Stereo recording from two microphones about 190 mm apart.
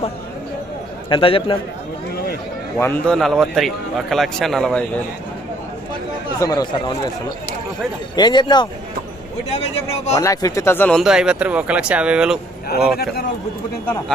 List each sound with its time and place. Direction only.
1.1 s speech: 30° left (ahead or behind)
2.7 s speech: 10° left (ahead or behind)
6.4 s speech: 20° left (ahead or behind)
8.1 s speech: 25° left (ahead or behind)
10.2 s speech: 15° left (ahead or behind); by 12.4 s 5° right (ahead or behind)